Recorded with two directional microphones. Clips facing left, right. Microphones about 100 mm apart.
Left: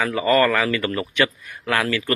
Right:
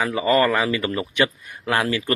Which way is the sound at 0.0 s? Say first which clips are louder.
Left 1 dB; 20° right (ahead or behind).